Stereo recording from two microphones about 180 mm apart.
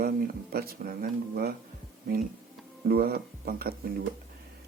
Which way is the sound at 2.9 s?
60° right (ahead or behind).